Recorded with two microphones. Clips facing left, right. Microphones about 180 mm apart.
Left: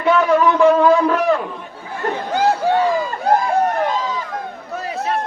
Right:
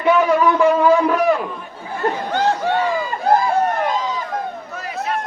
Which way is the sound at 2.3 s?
10° left (ahead or behind).